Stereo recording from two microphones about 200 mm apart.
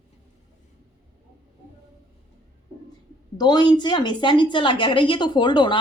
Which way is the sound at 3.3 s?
20° left (ahead or behind).